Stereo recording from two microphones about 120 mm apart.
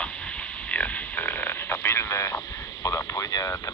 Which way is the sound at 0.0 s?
10° left (ahead or behind).